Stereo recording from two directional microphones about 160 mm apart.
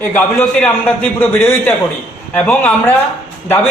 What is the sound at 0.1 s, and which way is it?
A man's voice, 15° left (ahead or behind).